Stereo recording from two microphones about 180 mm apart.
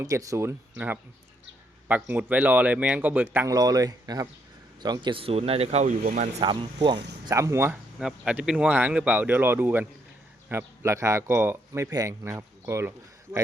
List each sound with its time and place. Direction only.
0.0 s speech: 20° right (ahead or behind)
1.9 s speech: 10° right (ahead or behind); by 5.9 s 35° right (ahead or behind)
6.0 s speech: 55° right (ahead or behind)
6.4 s speech: 30° right (ahead or behind)
7.9 s speech: centre (ahead or behind)